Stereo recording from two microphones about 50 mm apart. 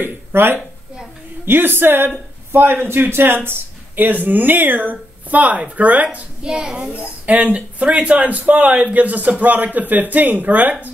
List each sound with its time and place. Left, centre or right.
0.0 s speech: right
6.4 s a child's voice: centre
7.2 s speech: right